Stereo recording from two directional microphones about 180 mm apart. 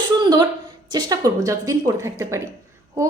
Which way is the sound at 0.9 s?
25° right (ahead or behind).